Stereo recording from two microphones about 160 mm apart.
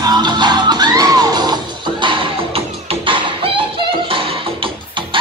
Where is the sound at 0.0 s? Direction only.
25° right (ahead or behind).